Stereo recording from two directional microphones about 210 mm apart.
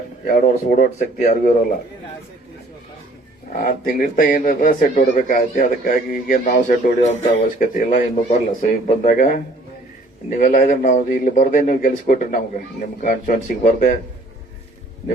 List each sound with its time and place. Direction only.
0.3 s a man's voice: 40° left (ahead or behind)
3.6 s a man's voice: 45° left (ahead or behind)